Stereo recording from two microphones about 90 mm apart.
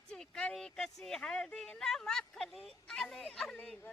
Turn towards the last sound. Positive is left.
turn(degrees=10)  # may be behind; listen again after turning